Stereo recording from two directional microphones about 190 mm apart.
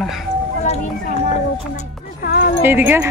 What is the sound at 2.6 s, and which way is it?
Speech, 10° right (ahead or behind).